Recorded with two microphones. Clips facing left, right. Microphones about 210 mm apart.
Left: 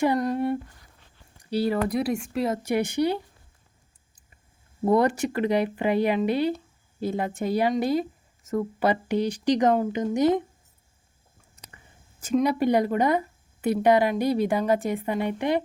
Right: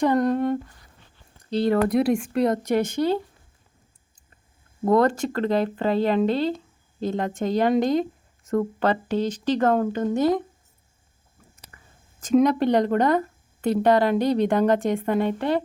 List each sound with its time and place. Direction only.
0.0 s humming: 10° left (ahead or behind)
1.4 s speech: 10° left (ahead or behind)
4.9 s speech: 10° left (ahead or behind)
11.7 s a sound: 25° left (ahead or behind)
12.2 s speech: 10° left (ahead or behind)